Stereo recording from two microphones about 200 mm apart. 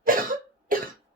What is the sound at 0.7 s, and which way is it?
Cough, 45° right (ahead or behind).